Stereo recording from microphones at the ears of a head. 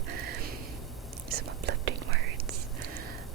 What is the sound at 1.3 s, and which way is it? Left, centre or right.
Whispering, right.